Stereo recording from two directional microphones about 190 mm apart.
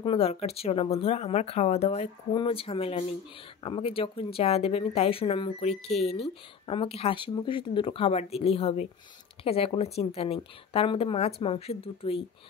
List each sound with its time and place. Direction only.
0.0 s speech: 30° left (ahead or behind)